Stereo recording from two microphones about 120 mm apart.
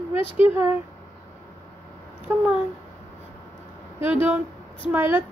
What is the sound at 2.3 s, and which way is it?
Speech, 20° right (ahead or behind).